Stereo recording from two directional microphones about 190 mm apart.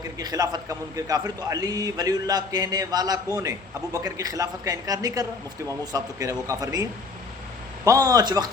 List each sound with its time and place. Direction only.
0.2 s a man's voice: 20° right (ahead or behind)
7.9 s a man's voice: 20° right (ahead or behind)